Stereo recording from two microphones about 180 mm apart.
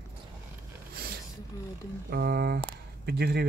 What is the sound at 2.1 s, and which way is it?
Speech, 60° right (ahead or behind).